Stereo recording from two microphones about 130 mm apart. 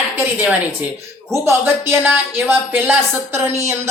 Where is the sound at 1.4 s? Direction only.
15° right (ahead or behind).